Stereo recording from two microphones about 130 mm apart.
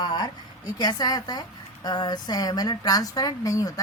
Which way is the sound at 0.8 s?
30° left (ahead or behind).